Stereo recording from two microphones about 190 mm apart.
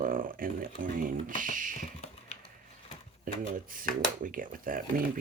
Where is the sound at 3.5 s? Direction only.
45° right (ahead or behind).